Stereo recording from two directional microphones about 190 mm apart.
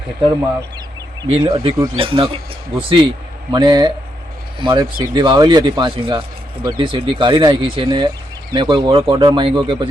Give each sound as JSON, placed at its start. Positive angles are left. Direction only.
{"t": 1.3, "sound": "speech", "side_deg": -30}